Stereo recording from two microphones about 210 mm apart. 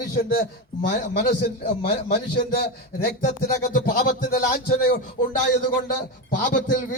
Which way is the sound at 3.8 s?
40° left (ahead or behind).